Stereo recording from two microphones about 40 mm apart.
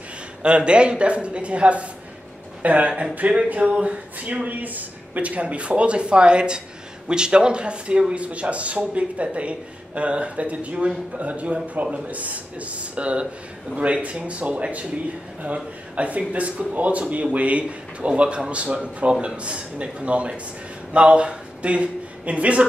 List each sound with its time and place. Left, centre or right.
0.4 s speech: right